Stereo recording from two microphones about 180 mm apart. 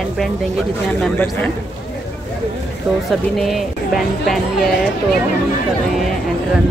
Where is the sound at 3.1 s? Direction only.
Centre (ahead or behind).